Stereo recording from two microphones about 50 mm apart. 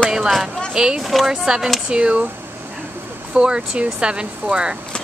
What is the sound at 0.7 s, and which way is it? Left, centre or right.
Speech, centre.